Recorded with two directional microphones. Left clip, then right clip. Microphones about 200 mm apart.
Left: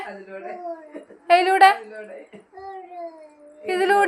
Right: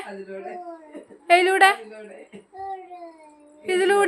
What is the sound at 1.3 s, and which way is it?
Speech, 15° right (ahead or behind).